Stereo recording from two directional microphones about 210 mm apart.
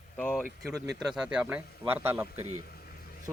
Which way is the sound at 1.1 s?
5° right (ahead or behind).